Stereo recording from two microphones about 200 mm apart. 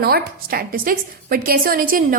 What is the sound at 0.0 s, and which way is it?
A woman's voice, 50° right (ahead or behind).